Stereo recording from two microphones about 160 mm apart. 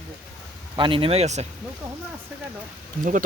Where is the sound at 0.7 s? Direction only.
30° right (ahead or behind).